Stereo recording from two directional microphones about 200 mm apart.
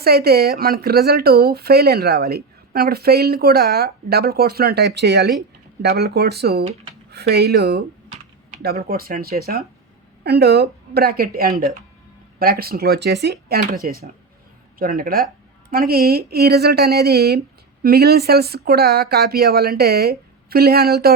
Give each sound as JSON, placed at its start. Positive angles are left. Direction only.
{"t": 0.0, "sound": "speech", "side_deg": -50}
{"t": 14.8, "sound": "speech", "side_deg": -45}